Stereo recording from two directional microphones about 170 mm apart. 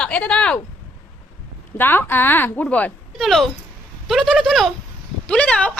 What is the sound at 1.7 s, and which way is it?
A woman's voice, 10° left (ahead or behind).